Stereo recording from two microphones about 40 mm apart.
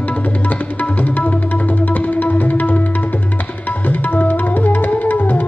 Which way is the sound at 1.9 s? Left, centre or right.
Left.